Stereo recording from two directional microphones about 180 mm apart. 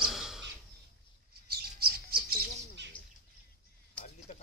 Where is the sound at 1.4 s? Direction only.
60° right (ahead or behind).